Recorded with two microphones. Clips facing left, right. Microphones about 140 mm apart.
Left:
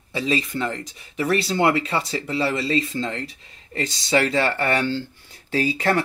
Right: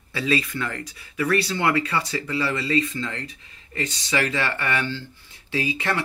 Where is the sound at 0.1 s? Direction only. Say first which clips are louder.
Left 1 dB; 20° left (ahead or behind).